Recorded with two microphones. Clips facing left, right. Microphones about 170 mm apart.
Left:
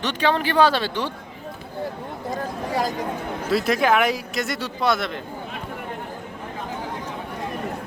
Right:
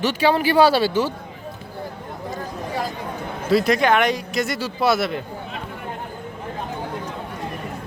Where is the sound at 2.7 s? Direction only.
40° left (ahead or behind).